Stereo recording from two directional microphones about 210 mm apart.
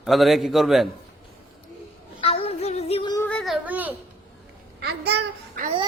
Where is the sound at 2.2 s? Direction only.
25° left (ahead or behind).